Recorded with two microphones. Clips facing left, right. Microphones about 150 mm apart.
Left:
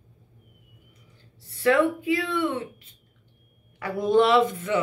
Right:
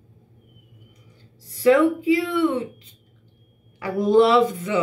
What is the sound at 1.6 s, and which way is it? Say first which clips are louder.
Speech: right 5 dB; 15° right (ahead or behind).